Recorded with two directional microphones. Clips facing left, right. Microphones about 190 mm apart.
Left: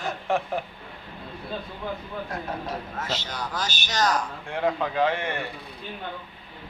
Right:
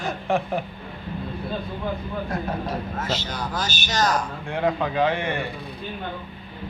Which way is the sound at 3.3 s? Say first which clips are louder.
Right 3 dB; 30° right (ahead or behind).